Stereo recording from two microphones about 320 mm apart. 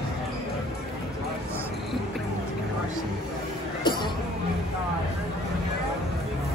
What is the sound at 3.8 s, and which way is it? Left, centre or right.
Music, centre.